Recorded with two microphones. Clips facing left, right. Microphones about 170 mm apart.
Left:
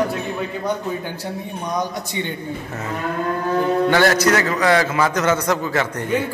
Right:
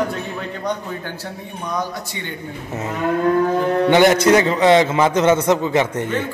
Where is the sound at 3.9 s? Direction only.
20° right (ahead or behind).